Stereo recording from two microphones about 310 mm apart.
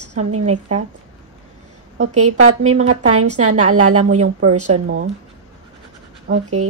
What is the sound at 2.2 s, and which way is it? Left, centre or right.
A woman's voice, right.